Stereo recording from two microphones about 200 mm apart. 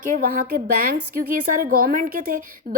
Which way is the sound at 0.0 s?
45° right (ahead or behind).